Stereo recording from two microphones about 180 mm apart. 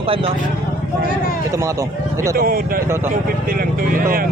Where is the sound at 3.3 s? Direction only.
55° right (ahead or behind).